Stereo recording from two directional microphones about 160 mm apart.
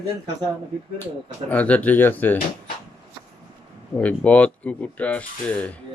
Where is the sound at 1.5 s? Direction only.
10° left (ahead or behind).